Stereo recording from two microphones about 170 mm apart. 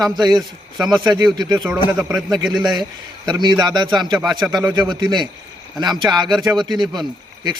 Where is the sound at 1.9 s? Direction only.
5° right (ahead or behind).